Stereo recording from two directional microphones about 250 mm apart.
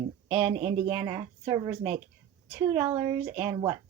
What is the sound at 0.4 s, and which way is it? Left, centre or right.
A woman's voice, centre.